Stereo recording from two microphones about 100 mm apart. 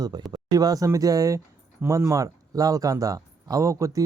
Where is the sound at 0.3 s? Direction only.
40° right (ahead or behind).